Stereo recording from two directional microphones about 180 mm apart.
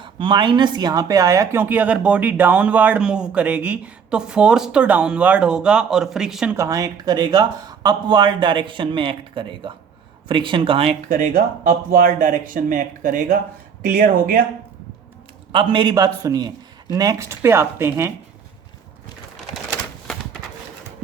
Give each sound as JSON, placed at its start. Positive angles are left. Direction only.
{"t": 0.0, "sound": "speech", "side_deg": -25}
{"t": 6.6, "sound": "speech", "side_deg": -20}
{"t": 11.1, "sound": "speech", "side_deg": -50}
{"t": 15.5, "sound": "speech", "side_deg": -25}